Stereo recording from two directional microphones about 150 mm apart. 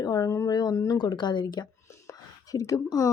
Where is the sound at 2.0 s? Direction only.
25° left (ahead or behind).